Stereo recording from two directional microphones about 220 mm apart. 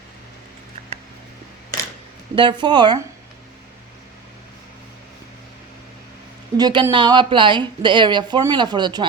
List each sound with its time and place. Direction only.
2.3 s speech: 20° right (ahead or behind)
6.6 s speech: 20° right (ahead or behind)